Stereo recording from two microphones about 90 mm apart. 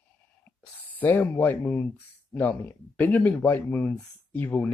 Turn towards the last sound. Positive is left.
turn(degrees=20)  # may be behind; listen again after turning